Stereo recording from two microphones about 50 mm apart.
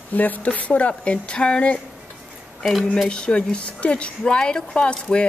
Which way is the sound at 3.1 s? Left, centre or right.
Centre.